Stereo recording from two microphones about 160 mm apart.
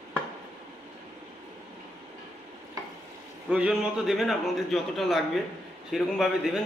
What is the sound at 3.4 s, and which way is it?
A man's voice, 5° right (ahead or behind).